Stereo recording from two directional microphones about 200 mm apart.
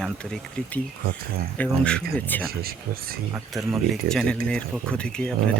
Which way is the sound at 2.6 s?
50° right (ahead or behind).